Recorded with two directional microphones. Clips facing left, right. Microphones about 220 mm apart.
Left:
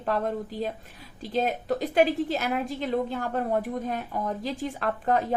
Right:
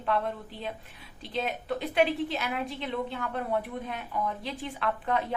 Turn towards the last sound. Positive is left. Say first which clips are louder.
# left 4 dB
turn(degrees=45)  # may be behind; listen again after turning